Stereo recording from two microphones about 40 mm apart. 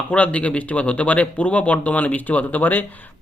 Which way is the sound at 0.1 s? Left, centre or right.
Left.